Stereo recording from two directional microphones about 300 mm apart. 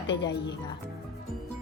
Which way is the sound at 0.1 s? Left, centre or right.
Left.